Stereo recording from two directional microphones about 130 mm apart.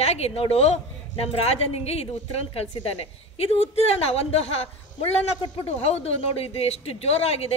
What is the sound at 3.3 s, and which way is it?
A woman's voice, 50° left (ahead or behind).